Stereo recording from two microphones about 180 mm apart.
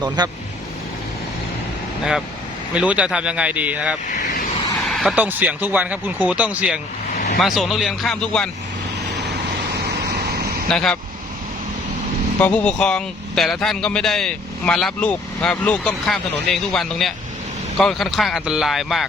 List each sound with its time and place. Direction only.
2.7 s speech: 5° right (ahead or behind)
10.1 s vehicle: 60° right (ahead or behind)
10.7 s speech: 5° left (ahead or behind)
12.4 s speech: 5° left (ahead or behind)